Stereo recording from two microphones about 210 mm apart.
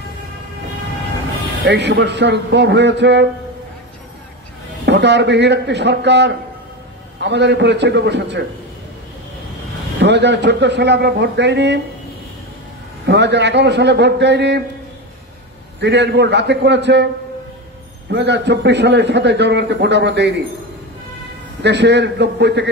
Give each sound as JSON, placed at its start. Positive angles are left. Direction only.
{"t": 1.6, "sound": "a man's voice", "side_deg": -55}
{"t": 4.8, "sound": "a man's voice", "side_deg": -55}
{"t": 9.9, "sound": "a man's voice", "side_deg": -55}
{"t": 13.0, "sound": "a man's voice", "side_deg": -55}
{"t": 15.8, "sound": "a man's voice", "side_deg": -55}
{"t": 18.1, "sound": "a man's voice", "side_deg": -55}
{"t": 21.6, "sound": "a man's voice", "side_deg": -55}